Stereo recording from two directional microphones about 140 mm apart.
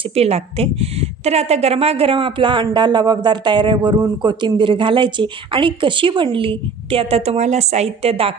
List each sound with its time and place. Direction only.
0.1 s a woman's voice: 45° right (ahead or behind)